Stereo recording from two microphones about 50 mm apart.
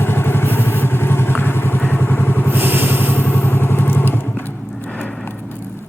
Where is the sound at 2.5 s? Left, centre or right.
Right.